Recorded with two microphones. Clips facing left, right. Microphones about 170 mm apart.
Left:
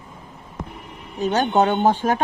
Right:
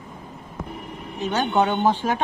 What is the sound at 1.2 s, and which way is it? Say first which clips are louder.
Speech: left 3 dB; 45° left (ahead or behind).